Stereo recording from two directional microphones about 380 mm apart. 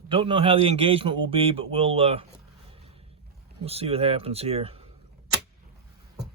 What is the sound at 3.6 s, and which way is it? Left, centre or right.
Speech, centre.